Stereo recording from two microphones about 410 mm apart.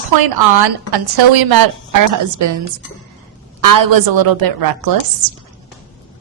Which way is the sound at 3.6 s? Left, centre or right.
Right.